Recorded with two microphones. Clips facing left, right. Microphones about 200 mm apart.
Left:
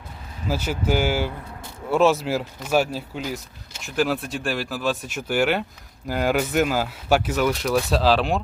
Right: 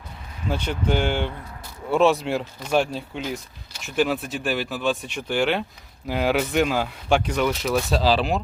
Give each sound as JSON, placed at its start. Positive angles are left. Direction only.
{"t": 0.4, "sound": "speech", "side_deg": 5}